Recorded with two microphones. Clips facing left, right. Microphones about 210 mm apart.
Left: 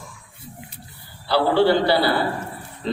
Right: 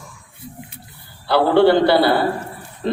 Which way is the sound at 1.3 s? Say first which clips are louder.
Right 4 dB; 55° right (ahead or behind).